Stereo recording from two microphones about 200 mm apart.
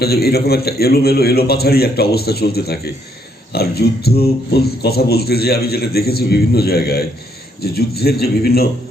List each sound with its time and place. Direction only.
0.0 s a man's voice: 50° left (ahead or behind)